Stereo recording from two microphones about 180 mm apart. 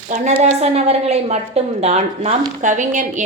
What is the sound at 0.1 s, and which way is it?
A woman's voice, 40° right (ahead or behind).